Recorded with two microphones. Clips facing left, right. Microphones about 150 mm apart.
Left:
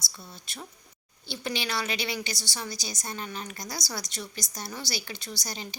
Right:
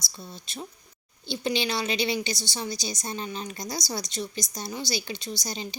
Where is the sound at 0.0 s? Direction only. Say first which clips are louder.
Right 4 dB; 20° right (ahead or behind).